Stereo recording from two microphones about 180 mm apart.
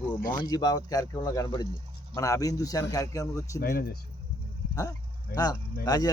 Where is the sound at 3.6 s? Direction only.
55° left (ahead or behind).